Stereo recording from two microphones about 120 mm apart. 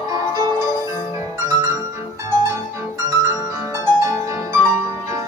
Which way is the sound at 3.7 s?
25° right (ahead or behind).